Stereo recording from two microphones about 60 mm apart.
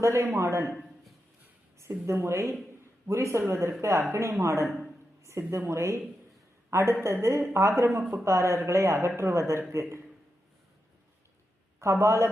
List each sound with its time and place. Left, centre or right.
0.0 s a man's voice: right
1.9 s speech: right
4.7 s a sound: centre
5.2 s a woman's voice: right
11.8 s speech: right